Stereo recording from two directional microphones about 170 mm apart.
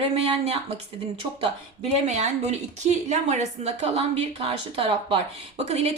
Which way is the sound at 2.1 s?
40° right (ahead or behind).